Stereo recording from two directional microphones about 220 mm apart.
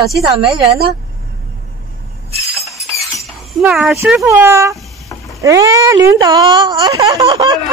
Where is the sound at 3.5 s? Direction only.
5° right (ahead or behind).